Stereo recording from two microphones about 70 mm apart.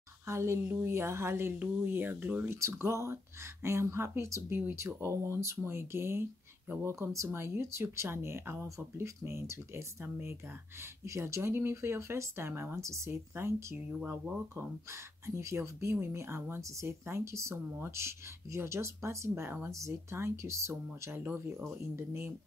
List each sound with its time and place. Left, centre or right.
0.3 s speech: right
2.5 s speech: right
7.2 s speech: right
11.1 s speech: right
15.2 s speech: right
21.2 s speech: right